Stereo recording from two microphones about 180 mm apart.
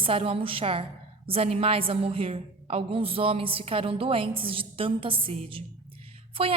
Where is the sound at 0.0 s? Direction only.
30° right (ahead or behind).